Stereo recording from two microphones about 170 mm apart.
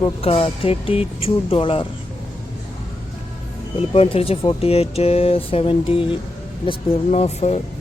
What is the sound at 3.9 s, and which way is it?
Speech, 35° left (ahead or behind).